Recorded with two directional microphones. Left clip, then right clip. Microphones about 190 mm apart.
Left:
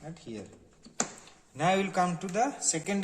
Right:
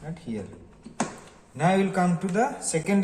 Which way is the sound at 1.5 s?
50° left (ahead or behind).